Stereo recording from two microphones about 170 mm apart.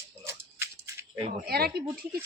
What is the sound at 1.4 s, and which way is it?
Speech, 65° right (ahead or behind).